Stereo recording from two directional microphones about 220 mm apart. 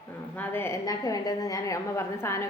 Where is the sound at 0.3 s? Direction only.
10° left (ahead or behind).